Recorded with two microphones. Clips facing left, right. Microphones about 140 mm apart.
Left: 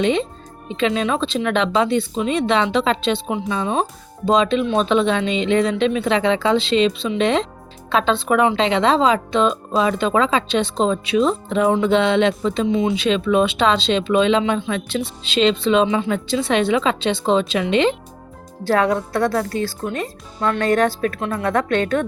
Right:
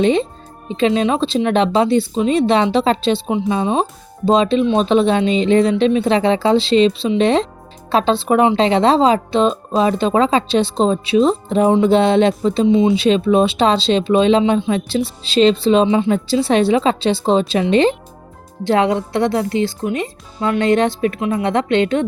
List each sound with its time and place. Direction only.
0.0 s speech: 35° right (ahead or behind)
12.6 s speech: 25° right (ahead or behind)
18.6 s speech: 20° right (ahead or behind)